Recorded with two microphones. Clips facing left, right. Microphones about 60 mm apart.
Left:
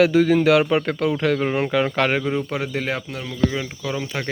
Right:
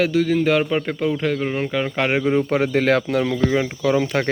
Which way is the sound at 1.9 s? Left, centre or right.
Centre.